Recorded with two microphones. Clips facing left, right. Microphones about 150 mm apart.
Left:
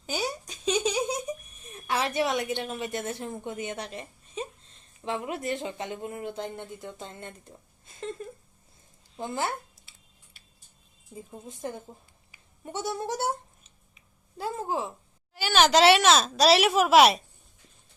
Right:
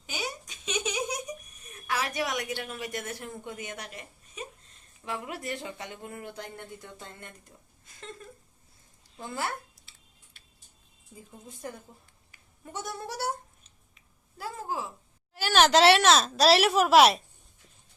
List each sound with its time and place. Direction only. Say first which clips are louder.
0.0 s a sound: left 5 dB; 35° left (ahead or behind)
5.0 s speech: left 5 dB; 25° left (ahead or behind)
9.1 s speech: left 4 dB; 25° left (ahead or behind)
11.1 s speech: left 6 dB; 25° left (ahead or behind)
14.3 s speech: left 4 dB; 25° left (ahead or behind)
15.4 s a child's voice: even; centre (ahead or behind)